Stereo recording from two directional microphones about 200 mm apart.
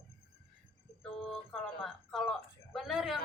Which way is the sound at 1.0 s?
5° left (ahead or behind).